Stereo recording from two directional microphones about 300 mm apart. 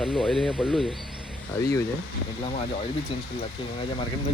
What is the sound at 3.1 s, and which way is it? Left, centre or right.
Speech, centre.